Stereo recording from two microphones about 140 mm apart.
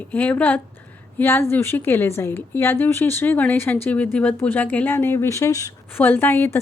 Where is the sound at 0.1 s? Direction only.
10° left (ahead or behind).